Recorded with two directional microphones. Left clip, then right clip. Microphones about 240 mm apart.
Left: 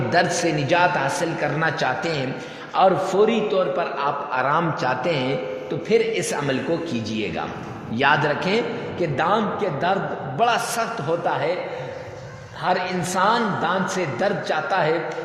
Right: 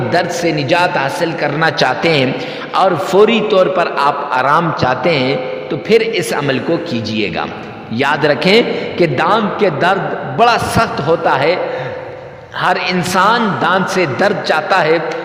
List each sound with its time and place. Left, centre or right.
0.1 s a man's voice: right
12.6 s a man's voice: right